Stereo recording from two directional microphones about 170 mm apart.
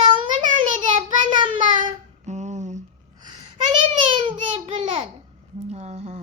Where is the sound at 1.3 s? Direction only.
30° right (ahead or behind).